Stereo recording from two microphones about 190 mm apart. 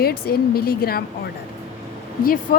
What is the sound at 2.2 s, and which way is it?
Speech, 50° left (ahead or behind).